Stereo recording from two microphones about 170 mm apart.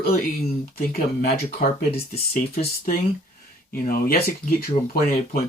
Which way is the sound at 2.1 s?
35° left (ahead or behind).